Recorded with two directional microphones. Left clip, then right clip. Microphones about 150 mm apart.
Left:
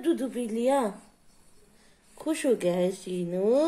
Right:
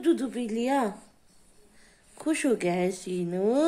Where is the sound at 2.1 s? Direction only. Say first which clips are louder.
Even; 30° right (ahead or behind).